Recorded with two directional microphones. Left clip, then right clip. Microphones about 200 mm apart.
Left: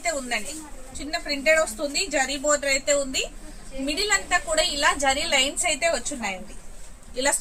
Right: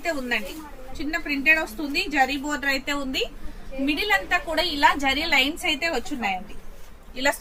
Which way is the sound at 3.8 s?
15° left (ahead or behind).